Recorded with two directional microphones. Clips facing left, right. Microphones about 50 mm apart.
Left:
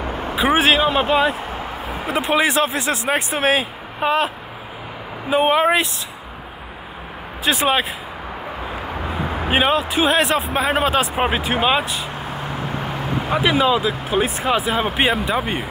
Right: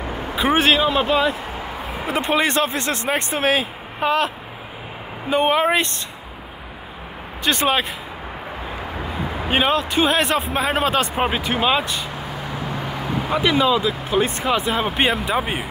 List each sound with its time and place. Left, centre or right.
0.4 s a man's voice: centre
0.8 s speech: left
2.0 s a man's voice: centre
5.3 s a man's voice: centre
7.4 s a man's voice: centre
9.5 s a man's voice: centre
13.3 s a man's voice: centre